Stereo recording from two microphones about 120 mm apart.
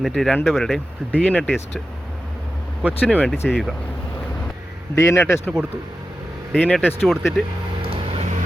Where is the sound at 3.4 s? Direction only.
5° right (ahead or behind).